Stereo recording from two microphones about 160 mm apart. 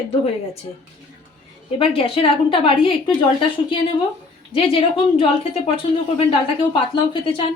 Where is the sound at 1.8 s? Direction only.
35° left (ahead or behind).